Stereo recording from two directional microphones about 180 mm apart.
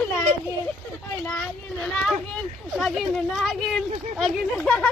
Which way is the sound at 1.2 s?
5° left (ahead or behind).